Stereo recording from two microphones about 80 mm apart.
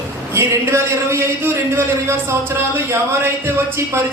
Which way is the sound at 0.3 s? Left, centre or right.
Right.